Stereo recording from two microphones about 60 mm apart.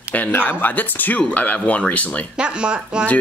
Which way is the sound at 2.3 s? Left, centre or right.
Centre.